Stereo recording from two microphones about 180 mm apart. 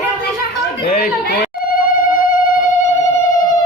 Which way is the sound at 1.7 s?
50° left (ahead or behind).